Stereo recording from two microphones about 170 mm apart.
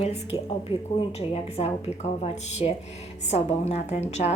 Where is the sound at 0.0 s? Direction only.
35° left (ahead or behind).